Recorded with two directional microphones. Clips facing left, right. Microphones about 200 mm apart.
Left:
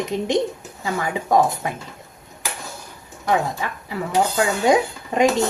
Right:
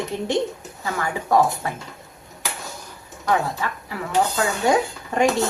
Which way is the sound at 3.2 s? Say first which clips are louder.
Left 1 dB; 15° left (ahead or behind).